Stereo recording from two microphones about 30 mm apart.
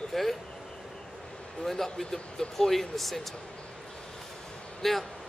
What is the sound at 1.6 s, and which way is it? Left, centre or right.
Speech, centre.